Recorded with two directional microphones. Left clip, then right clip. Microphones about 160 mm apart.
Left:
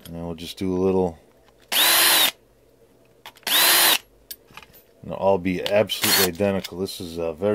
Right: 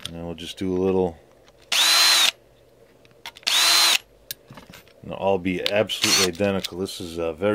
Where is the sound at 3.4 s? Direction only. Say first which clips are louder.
Even; 45° left (ahead or behind).